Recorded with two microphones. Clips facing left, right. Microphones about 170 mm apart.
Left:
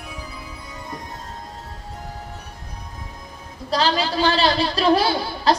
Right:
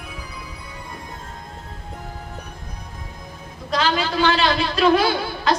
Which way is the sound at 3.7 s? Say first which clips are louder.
Left 1 dB; 35° left (ahead or behind).